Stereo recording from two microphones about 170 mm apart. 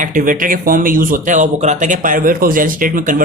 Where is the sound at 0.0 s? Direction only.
50° right (ahead or behind).